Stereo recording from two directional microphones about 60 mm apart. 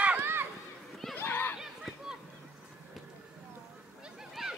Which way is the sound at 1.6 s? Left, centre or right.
Centre.